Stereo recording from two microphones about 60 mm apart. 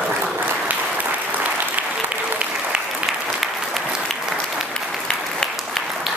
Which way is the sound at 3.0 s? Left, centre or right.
Centre.